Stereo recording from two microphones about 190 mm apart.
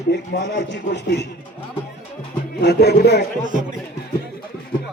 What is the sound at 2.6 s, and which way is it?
Speech, 60° left (ahead or behind).